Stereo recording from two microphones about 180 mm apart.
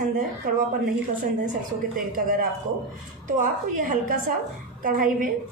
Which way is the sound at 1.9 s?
50° right (ahead or behind).